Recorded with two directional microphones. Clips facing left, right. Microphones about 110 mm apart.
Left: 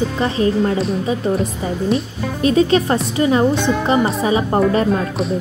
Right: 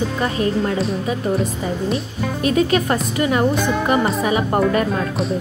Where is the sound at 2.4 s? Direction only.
30° left (ahead or behind).